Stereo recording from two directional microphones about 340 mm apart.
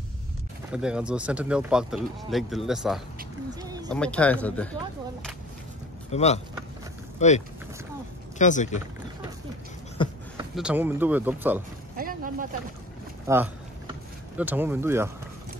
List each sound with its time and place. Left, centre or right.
0.7 s speech: centre
3.6 s a sound: centre
3.9 s speech: centre
6.1 s speech: centre
10.0 s a sound: centre
10.3 s speech: centre
12.0 s boat: right
13.3 s speech: centre